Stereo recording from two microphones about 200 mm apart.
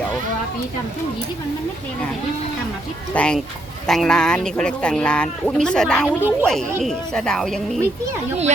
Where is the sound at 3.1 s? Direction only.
5° left (ahead or behind).